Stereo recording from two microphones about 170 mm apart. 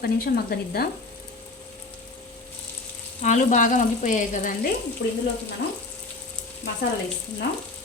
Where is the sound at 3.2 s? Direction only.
45° left (ahead or behind).